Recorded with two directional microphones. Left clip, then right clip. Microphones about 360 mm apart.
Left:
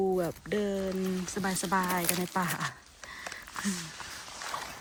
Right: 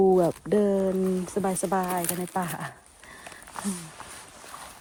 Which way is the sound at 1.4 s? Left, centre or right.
Centre.